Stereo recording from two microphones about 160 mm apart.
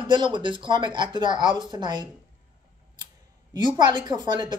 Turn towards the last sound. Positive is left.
turn(degrees=-25)  # may be behind; listen again after turning